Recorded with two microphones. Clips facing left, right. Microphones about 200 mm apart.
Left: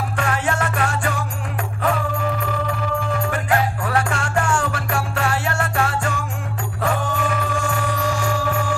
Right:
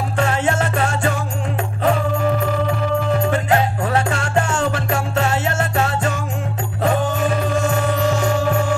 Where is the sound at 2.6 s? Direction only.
25° right (ahead or behind).